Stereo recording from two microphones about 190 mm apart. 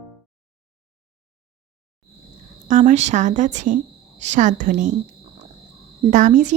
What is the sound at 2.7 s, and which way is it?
Speech, 40° right (ahead or behind).